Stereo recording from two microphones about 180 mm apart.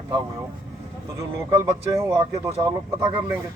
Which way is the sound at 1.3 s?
15° right (ahead or behind).